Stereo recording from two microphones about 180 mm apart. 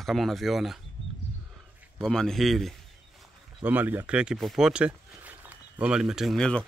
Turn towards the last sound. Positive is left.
turn(degrees=5)  # may be behind; listen again after turning